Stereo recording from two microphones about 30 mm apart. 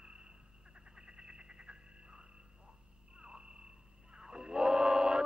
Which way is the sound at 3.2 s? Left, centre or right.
Right.